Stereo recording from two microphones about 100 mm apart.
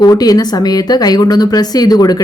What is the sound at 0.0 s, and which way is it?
Speech, 40° left (ahead or behind).